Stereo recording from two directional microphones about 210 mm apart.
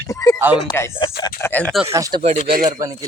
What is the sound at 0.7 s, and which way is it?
Speech, 20° left (ahead or behind).